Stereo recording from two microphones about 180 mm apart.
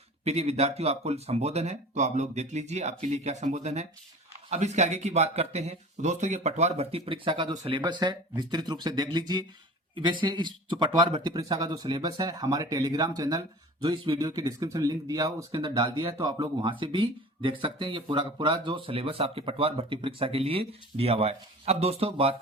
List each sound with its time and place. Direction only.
0.3 s speech: 35° right (ahead or behind)